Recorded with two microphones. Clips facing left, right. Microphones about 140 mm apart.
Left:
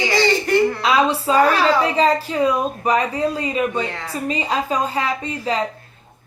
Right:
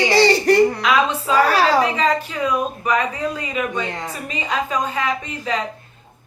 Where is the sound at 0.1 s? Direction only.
35° right (ahead or behind).